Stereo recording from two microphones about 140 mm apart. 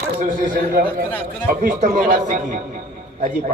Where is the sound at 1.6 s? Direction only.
70° right (ahead or behind).